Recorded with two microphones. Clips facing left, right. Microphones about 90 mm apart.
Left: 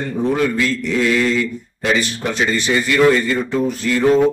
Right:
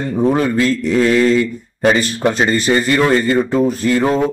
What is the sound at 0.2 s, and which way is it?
A man's voice, 40° right (ahead or behind).